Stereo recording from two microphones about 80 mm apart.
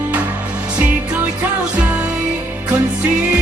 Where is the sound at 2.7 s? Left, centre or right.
Centre.